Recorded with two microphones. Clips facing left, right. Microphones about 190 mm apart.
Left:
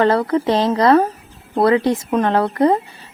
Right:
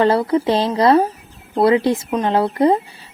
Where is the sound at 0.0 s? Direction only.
10° right (ahead or behind).